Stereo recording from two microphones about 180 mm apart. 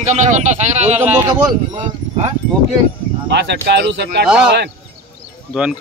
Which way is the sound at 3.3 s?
75° right (ahead or behind).